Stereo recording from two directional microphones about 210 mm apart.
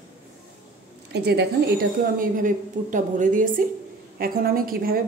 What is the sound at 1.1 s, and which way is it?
A woman's voice, 50° right (ahead or behind).